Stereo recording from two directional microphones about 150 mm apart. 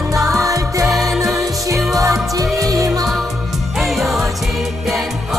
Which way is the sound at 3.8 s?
Centre (ahead or behind).